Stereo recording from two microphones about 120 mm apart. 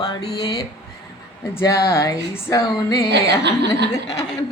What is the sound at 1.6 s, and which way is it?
Speech, 25° left (ahead or behind).